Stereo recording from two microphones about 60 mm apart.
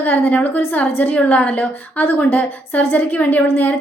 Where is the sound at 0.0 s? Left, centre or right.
Left.